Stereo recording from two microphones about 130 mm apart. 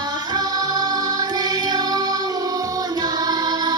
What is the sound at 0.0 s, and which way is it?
Music, 30° right (ahead or behind).